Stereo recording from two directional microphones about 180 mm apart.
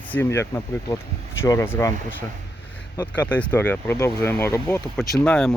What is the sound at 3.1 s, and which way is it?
Speech, 10° left (ahead or behind).